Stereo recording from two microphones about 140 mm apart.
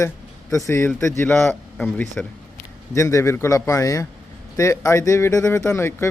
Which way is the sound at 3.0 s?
20° left (ahead or behind).